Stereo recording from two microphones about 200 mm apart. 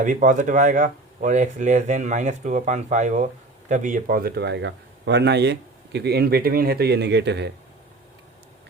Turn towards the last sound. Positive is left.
turn(degrees=-60)  # may be behind; listen again after turning